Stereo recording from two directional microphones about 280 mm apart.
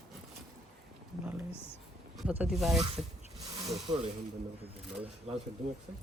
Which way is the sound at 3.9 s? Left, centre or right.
Centre.